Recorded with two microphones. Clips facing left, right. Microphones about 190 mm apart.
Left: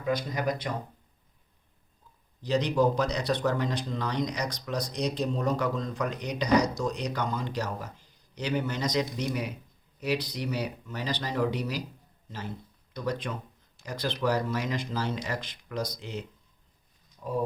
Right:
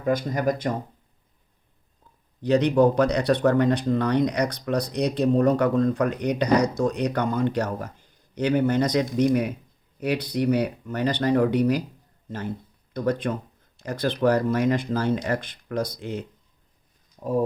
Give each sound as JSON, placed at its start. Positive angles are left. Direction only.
{"t": 0.0, "sound": "speech", "side_deg": -50}
{"t": 2.4, "sound": "speech", "side_deg": -60}
{"t": 12.9, "sound": "speech", "side_deg": -50}